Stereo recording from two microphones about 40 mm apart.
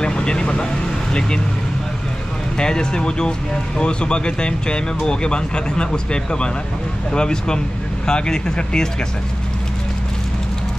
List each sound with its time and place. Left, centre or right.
0.0 s speech: left
2.5 s speech: centre